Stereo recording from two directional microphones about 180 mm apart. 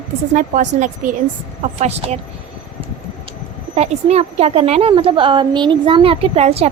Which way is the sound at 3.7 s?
35° right (ahead or behind).